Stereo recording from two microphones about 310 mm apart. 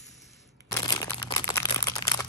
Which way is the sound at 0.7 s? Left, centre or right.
Centre.